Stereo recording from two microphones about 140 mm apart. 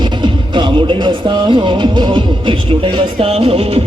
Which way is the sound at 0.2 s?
35° right (ahead or behind).